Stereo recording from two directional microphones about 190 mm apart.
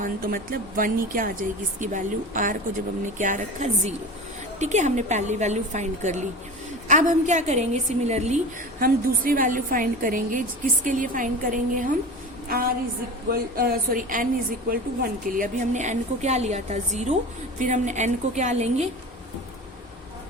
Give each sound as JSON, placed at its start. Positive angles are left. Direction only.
{"t": 0.0, "sound": "a woman's voice", "side_deg": -50}
{"t": 8.8, "sound": "speech", "side_deg": -45}
{"t": 15.3, "sound": "a woman's voice", "side_deg": -40}